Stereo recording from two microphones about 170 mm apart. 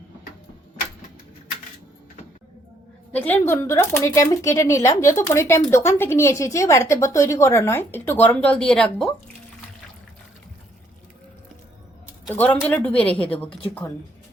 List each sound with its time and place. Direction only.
3.1 s a woman's voice: 10° left (ahead or behind)
12.3 s a woman's voice: 10° left (ahead or behind)